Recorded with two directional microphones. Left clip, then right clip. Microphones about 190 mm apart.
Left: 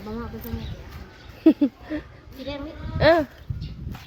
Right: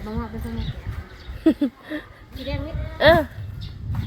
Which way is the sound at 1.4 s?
20° left (ahead or behind).